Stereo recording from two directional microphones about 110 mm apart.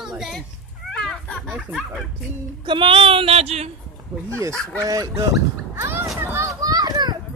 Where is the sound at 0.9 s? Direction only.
5° left (ahead or behind).